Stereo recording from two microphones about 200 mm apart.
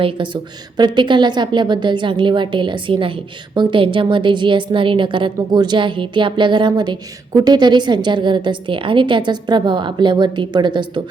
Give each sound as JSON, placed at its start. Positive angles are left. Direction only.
{"t": 0.0, "sound": "a woman's voice", "side_deg": -25}